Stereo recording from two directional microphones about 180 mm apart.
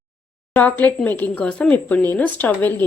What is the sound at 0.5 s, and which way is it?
Speech, 10° left (ahead or behind).